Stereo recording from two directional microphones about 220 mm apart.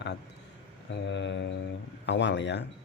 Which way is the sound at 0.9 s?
55° left (ahead or behind).